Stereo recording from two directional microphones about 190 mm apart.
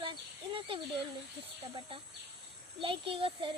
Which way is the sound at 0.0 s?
25° right (ahead or behind).